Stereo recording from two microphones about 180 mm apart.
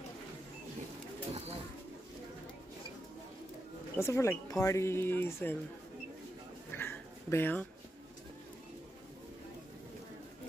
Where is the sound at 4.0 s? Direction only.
15° left (ahead or behind).